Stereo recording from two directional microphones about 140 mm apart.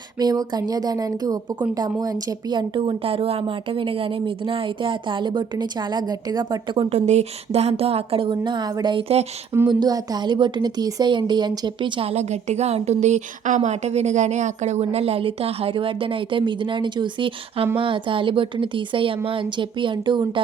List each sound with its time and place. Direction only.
0.2 s a woman's voice: 30° right (ahead or behind)
6.9 s a woman's voice: 50° right (ahead or behind)
9.6 s a woman's voice: 30° right (ahead or behind)